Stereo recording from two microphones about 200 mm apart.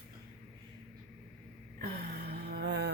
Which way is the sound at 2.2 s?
55° right (ahead or behind).